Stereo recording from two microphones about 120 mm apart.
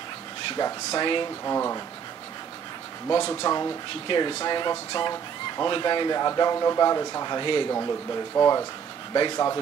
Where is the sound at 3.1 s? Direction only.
35° left (ahead or behind).